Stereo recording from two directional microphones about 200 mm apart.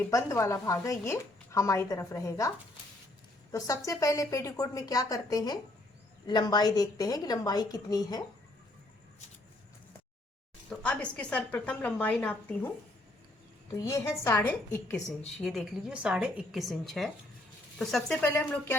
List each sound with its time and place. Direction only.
0.0 s a woman's voice: 15° left (ahead or behind)
3.8 s a woman's voice: 15° left (ahead or behind)
10.7 s a woman's voice: 5° left (ahead or behind)
13.7 s a woman's voice: 15° left (ahead or behind)
15.4 s a woman's voice: centre (ahead or behind)